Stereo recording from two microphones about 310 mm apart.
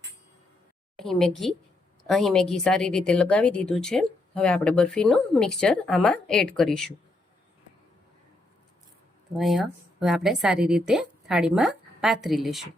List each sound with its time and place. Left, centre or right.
0.9 s a woman's voice: centre
9.4 s a woman's voice: centre